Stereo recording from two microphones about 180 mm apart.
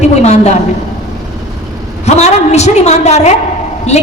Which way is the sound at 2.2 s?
40° left (ahead or behind).